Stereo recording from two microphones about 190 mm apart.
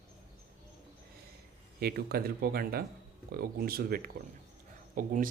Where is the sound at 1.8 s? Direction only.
55° right (ahead or behind).